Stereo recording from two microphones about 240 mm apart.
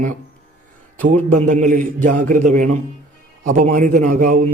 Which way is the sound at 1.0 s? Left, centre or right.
Right.